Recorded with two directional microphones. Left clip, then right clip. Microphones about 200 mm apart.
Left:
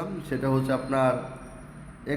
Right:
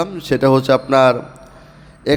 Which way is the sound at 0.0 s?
40° right (ahead or behind).